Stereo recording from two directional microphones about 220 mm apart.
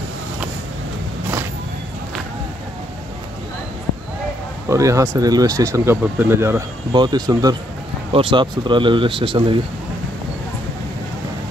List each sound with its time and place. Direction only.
4.6 s speech: 15° right (ahead or behind)